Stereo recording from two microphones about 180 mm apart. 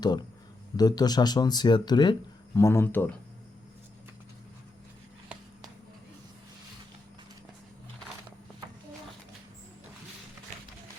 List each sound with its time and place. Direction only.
0.8 s speech: 20° left (ahead or behind)